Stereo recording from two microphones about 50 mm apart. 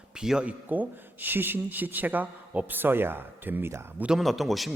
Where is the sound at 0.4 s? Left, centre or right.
Right.